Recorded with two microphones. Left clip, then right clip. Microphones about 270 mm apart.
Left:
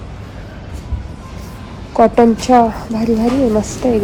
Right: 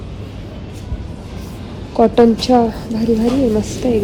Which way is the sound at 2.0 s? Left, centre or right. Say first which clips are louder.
Left 1 dB; centre.